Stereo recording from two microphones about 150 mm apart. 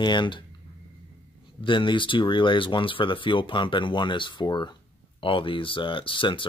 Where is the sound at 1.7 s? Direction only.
35° left (ahead or behind).